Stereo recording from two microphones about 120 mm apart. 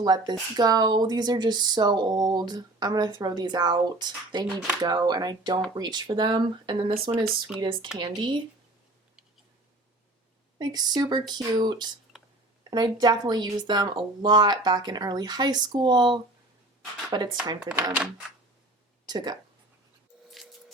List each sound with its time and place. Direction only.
0.0 s speech: 35° right (ahead or behind)
10.6 s speech: 35° right (ahead or behind)
17.6 s speech: 10° right (ahead or behind)
19.0 s speech: 35° right (ahead or behind)